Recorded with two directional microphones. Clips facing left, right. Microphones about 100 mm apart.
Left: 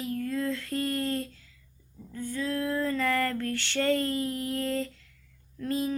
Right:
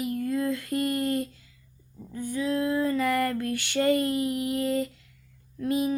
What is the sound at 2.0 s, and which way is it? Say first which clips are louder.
Female singing: right 3 dB; 15° right (ahead or behind).